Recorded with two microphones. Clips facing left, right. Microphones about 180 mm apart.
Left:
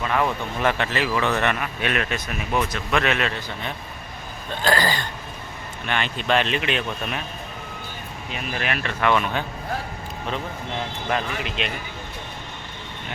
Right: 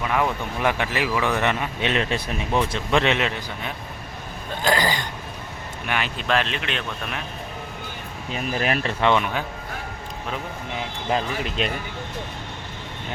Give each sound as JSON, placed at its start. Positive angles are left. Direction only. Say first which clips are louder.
{"t": 0.0, "sound": "speech", "louder": "even", "side_deg": -15}
{"t": 5.8, "sound": "speech", "louder": "left 1 dB", "side_deg": -5}
{"t": 8.3, "sound": "speech", "louder": "right 4 dB", "side_deg": -35}
{"t": 11.4, "sound": "speech", "louder": "right 3 dB", "side_deg": -40}